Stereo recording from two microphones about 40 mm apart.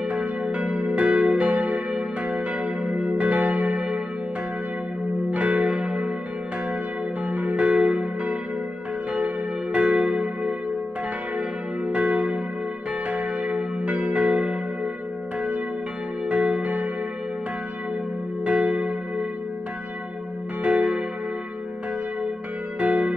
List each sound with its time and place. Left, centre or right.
0.5 s church bell: right
3.1 s church bell: right
5.3 s church bell: right
7.2 s church bell: right
16.3 s church bell: right
18.4 s church bell: right
20.6 s church bell: right
22.8 s music: right